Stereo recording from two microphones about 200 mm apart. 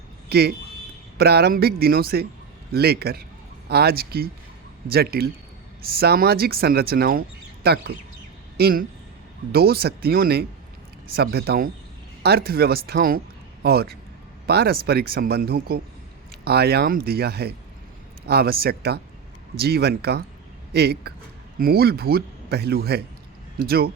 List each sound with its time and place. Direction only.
0.3 s speech: 55° right (ahead or behind)